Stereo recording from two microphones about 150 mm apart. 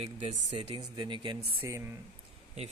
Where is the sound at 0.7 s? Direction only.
30° right (ahead or behind).